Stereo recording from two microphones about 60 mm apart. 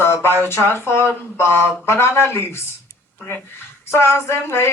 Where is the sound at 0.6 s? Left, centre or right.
Left.